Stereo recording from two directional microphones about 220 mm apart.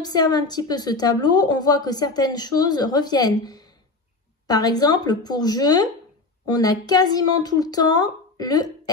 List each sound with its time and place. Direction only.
0.0 s speech: 20° left (ahead or behind)